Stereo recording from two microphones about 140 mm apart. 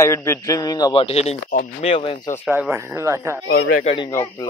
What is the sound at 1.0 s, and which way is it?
Speech, 50° left (ahead or behind).